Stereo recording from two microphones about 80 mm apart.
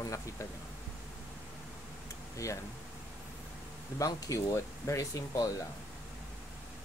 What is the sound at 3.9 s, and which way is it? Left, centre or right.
Speech, left.